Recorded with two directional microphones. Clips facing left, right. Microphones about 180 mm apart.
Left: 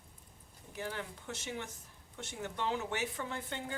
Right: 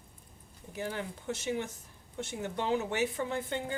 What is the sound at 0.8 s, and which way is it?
Speech, 20° right (ahead or behind).